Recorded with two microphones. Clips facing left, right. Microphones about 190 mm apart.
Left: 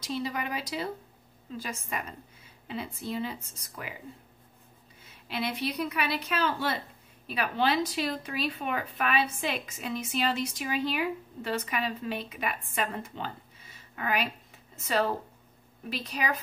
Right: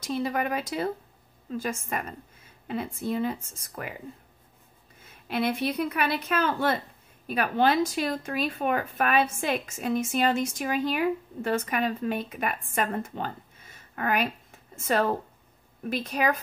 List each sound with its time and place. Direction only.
0.0 s speech: 50° right (ahead or behind)
5.0 s speech: 50° right (ahead or behind)